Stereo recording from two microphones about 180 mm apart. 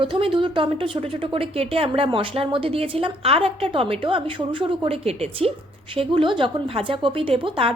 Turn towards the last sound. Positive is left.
turn(degrees=-30)  # may be behind; listen again after turning